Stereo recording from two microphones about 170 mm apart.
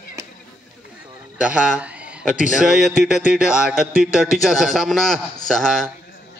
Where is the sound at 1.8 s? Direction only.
10° right (ahead or behind).